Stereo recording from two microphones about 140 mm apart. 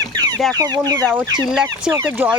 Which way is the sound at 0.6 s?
25° right (ahead or behind).